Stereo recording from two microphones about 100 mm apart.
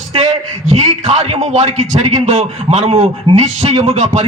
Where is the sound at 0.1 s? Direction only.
60° right (ahead or behind).